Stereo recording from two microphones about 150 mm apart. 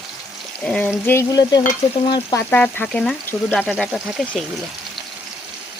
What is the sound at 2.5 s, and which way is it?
Speech, 10° left (ahead or behind).